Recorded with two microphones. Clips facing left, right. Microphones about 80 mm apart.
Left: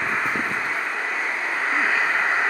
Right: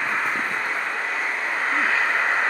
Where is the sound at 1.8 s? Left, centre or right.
Centre.